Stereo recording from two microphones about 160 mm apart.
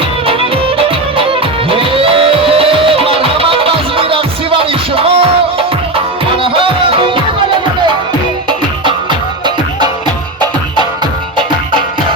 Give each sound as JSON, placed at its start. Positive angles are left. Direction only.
{"t": 0.9, "sound": "music", "side_deg": -35}
{"t": 8.4, "sound": "music", "side_deg": -30}